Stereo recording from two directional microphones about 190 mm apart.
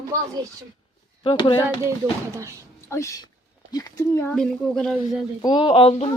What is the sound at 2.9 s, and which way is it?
Speech, 15° left (ahead or behind).